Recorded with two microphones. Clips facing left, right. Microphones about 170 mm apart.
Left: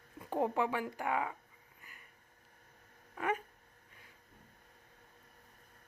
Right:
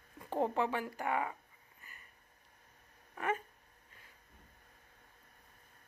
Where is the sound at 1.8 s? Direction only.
10° left (ahead or behind).